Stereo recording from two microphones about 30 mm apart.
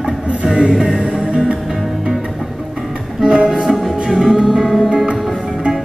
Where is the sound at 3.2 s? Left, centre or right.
Right.